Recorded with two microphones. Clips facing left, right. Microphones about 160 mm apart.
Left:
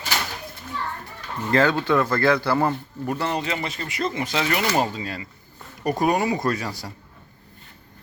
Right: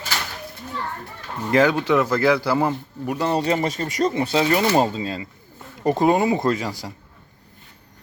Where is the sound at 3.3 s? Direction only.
40° right (ahead or behind); by 6.7 s 20° right (ahead or behind).